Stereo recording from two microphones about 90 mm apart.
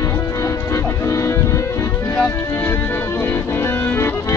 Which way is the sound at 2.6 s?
25° left (ahead or behind).